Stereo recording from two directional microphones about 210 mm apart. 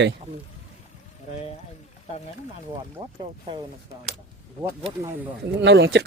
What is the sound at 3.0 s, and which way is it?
Speech, 25° right (ahead or behind).